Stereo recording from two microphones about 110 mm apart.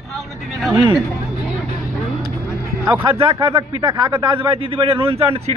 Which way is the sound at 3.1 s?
55° right (ahead or behind).